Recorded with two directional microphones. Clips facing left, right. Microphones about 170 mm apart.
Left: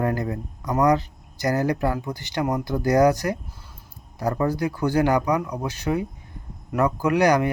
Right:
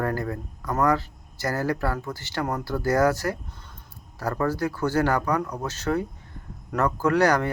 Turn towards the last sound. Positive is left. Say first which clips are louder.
# left 2 dB
turn(degrees=15)  # may be behind; listen again after turning